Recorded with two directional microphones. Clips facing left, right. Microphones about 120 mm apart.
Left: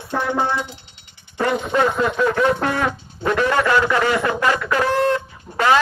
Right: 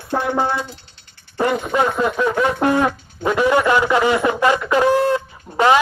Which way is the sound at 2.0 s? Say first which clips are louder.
Even; 10° right (ahead or behind).